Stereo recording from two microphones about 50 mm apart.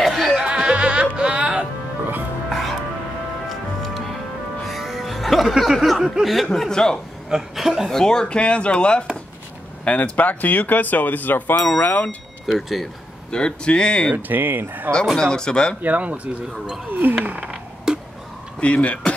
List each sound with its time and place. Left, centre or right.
0.0 s music: centre
0.4 s music: centre
2.5 s music: centre
6.2 s speech: centre
6.7 s speech: centre
7.2 s chuckle: centre
7.9 s speech: centre; by 12.2 s left
12.5 s speech: centre
13.3 s speech: centre
14.1 s speech: right
15.1 s speech: centre
15.8 s speech: right
17.4 s a sound: centre
18.6 s speech: left